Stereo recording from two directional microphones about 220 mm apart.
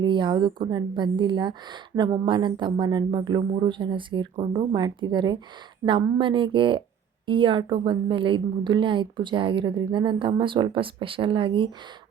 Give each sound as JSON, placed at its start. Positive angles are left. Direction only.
{"t": 0.0, "sound": "a woman's voice", "side_deg": -20}